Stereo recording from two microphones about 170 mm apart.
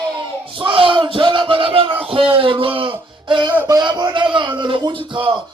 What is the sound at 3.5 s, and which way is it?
Speech, 10° right (ahead or behind).